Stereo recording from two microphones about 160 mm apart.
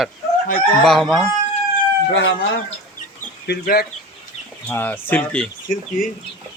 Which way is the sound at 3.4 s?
75° left (ahead or behind).